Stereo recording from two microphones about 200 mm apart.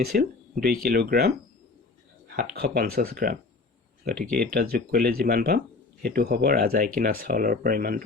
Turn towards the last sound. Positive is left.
turn(degrees=-45)  # may be behind; listen again after turning